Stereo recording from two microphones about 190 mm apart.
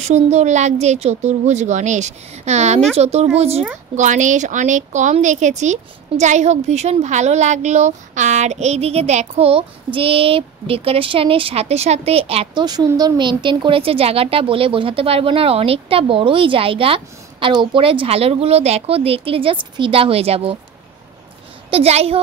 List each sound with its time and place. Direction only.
0.0 s a woman's voice: 35° right (ahead or behind)
21.6 s a woman's voice: 30° right (ahead or behind)